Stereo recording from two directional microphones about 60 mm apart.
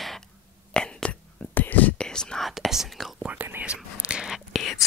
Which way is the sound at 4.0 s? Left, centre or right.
Centre.